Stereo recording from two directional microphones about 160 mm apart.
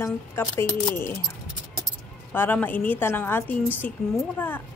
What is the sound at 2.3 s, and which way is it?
A woman's voice, 10° left (ahead or behind).